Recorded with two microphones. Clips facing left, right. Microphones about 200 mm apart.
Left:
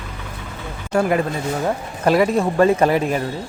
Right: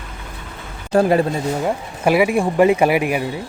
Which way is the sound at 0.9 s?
35° right (ahead or behind).